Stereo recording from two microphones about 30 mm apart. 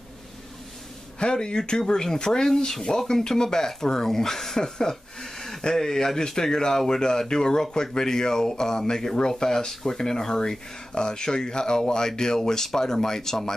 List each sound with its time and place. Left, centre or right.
1.2 s speech: left